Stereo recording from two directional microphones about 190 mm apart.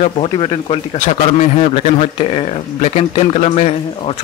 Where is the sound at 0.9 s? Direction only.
40° left (ahead or behind).